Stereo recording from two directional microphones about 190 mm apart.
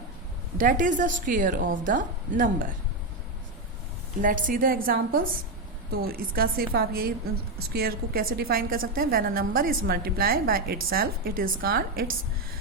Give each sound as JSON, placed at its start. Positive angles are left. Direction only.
{"t": 0.6, "sound": "a woman's voice", "side_deg": -45}
{"t": 4.2, "sound": "a woman's voice", "side_deg": -45}